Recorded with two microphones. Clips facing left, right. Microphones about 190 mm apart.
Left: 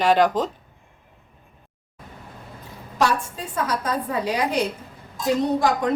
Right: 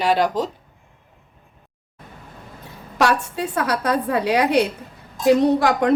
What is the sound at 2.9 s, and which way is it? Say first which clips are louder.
A woman's voice: right 3 dB; 70° right (ahead or behind).